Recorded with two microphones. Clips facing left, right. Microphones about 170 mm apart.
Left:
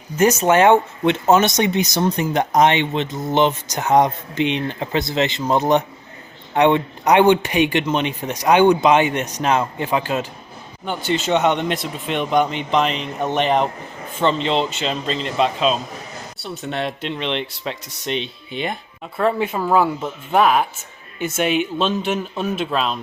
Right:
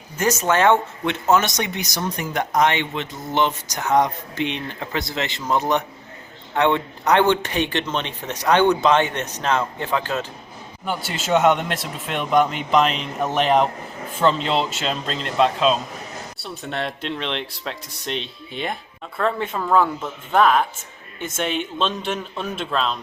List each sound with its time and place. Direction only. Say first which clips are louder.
0.2 s speech: left 5 dB; 20° left (ahead or behind)
10.8 s speech: left 4 dB; 5° right (ahead or behind)